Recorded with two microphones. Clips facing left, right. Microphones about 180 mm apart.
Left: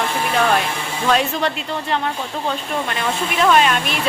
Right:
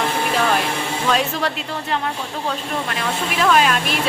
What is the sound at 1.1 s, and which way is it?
A woman's voice, centre (ahead or behind).